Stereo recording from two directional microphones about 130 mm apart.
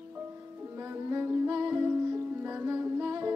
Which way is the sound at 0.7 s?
20° right (ahead or behind).